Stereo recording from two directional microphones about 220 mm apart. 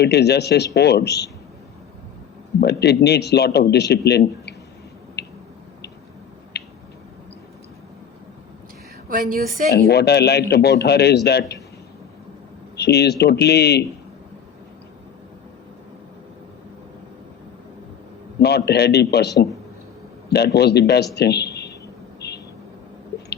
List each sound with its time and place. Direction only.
0.0 s speech: 50° left (ahead or behind)
2.6 s speech: 50° left (ahead or behind)
5.2 s a sound: 50° left (ahead or behind)
6.5 s a sound: 50° left (ahead or behind)
9.0 s speech: 40° right (ahead or behind)
9.6 s speech: 50° left (ahead or behind)
12.7 s speech: 50° left (ahead or behind)
18.3 s a man's voice: 50° left (ahead or behind)